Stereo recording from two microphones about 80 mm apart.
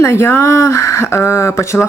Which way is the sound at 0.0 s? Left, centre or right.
Left.